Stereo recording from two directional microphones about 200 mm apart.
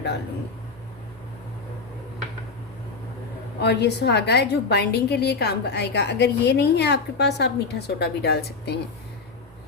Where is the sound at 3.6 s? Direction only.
55° left (ahead or behind).